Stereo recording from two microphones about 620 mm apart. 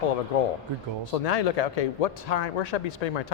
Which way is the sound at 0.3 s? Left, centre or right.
Left.